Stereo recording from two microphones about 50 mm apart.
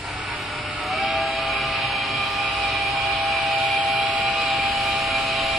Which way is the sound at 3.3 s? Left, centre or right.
Centre.